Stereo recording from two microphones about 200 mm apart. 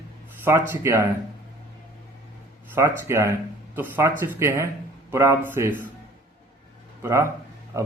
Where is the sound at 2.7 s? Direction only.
10° right (ahead or behind).